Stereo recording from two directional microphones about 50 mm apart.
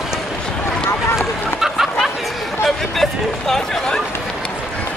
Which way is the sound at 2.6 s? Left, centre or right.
Centre.